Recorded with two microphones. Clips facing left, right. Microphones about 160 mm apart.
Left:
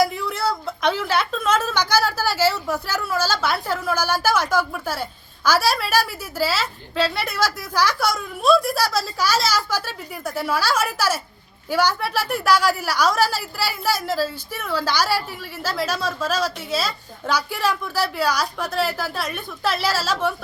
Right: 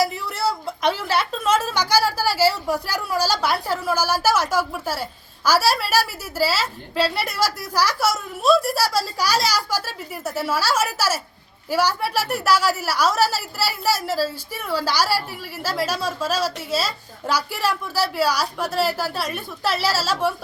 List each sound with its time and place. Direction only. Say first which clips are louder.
0.0 s a sound: left 1 dB; 5° right (ahead or behind)
0.9 s a woman's voice: left 1 dB; 5° right (ahead or behind)
3.2 s a woman's voice: right 2 dB; 40° right (ahead or behind)
3.8 s a woman's voice: right 1 dB; 5° right (ahead or behind)